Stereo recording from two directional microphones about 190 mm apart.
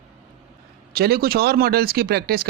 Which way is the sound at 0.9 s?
55° right (ahead or behind).